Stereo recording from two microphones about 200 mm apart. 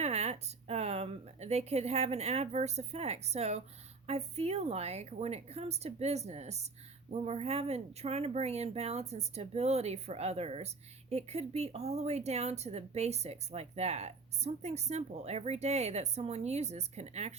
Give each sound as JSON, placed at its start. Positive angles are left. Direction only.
{"t": 0.0, "sound": "speech", "side_deg": -35}